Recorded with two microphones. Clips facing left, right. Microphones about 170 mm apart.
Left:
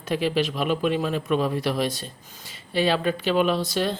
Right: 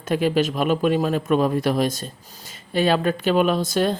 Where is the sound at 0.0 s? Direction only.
50° right (ahead or behind).